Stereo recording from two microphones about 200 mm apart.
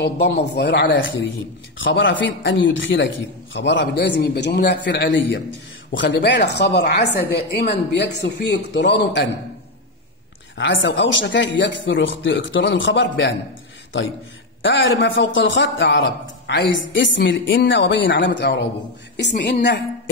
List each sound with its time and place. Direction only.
0.0 s a man's voice: 55° left (ahead or behind)
10.6 s speech: 65° left (ahead or behind)
14.6 s a man's voice: 70° left (ahead or behind)